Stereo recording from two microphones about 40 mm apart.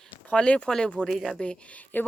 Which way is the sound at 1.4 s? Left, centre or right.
Left.